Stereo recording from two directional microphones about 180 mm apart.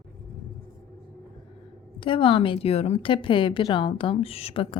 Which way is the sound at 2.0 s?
30° left (ahead or behind).